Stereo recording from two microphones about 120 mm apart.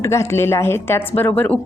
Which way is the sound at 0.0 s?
20° left (ahead or behind).